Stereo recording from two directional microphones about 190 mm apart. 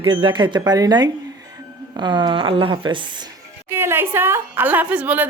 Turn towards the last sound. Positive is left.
turn(degrees=-10)  # may be behind; listen again after turning